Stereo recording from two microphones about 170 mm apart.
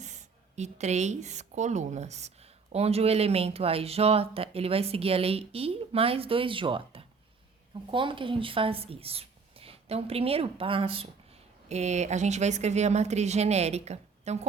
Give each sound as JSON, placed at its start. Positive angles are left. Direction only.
{"t": 0.0, "sound": "speech", "side_deg": -45}